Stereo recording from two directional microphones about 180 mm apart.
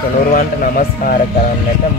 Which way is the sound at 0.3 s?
50° left (ahead or behind).